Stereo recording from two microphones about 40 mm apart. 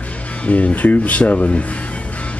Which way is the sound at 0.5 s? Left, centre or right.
Left.